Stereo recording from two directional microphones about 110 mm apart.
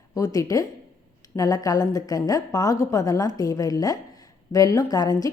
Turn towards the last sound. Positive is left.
turn(degrees=35)  # may be behind; listen again after turning